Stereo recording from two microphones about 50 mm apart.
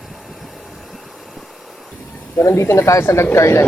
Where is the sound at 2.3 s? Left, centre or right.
Left.